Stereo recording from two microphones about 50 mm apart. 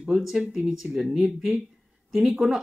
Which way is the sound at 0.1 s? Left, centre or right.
Centre.